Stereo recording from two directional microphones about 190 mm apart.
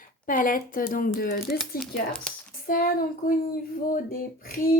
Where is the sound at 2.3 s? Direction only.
5° left (ahead or behind).